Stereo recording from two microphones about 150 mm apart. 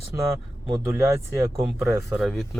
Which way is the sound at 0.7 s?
20° right (ahead or behind).